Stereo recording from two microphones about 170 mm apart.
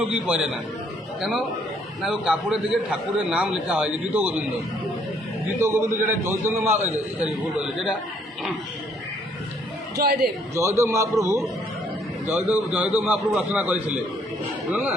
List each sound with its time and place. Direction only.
0.0 s a man's voice: 5° right (ahead or behind)
5.5 s a man's voice: 15° right (ahead or behind)
10.0 s a man's voice: 65° right (ahead or behind)
10.5 s a man's voice: 15° right (ahead or behind)